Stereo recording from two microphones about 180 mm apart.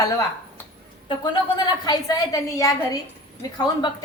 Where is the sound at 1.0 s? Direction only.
25° left (ahead or behind).